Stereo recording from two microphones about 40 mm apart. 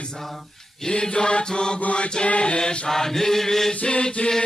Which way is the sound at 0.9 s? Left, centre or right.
Left.